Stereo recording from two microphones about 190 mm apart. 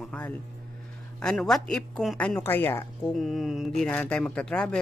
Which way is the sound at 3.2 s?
Centre (ahead or behind).